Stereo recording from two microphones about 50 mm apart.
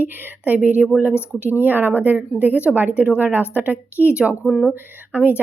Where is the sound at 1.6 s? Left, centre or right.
Right.